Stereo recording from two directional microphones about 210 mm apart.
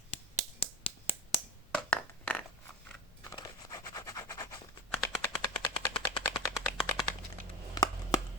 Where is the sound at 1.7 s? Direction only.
5° left (ahead or behind).